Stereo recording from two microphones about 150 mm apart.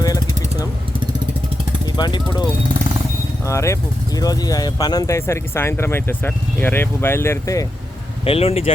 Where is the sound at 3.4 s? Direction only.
20° left (ahead or behind).